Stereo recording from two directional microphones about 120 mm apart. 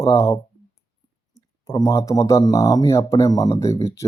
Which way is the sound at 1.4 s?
30° left (ahead or behind).